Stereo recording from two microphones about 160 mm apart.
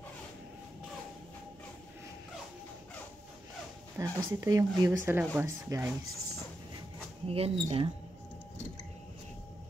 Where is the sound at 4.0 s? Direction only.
20° right (ahead or behind).